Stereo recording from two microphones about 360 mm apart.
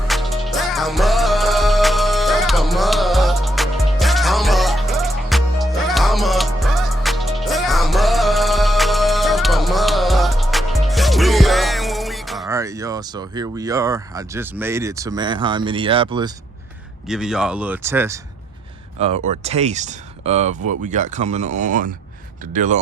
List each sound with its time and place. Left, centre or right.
0.1 s music: centre
17.1 s speech: centre
18.9 s speech: centre